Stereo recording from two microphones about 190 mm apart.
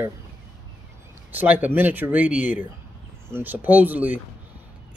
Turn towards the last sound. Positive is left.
turn(degrees=-10)  # may be behind; listen again after turning